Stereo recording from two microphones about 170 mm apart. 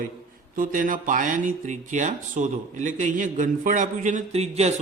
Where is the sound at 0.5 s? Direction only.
55° right (ahead or behind).